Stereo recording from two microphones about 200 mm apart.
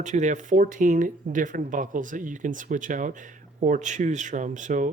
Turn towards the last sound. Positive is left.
turn(degrees=-40)  # may be behind; listen again after turning